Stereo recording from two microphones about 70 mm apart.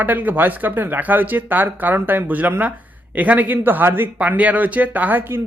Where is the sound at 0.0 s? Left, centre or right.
Right.